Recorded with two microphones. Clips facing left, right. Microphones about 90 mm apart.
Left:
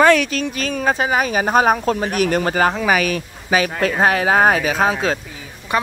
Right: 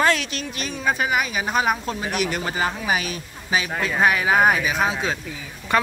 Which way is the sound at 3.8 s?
45° left (ahead or behind).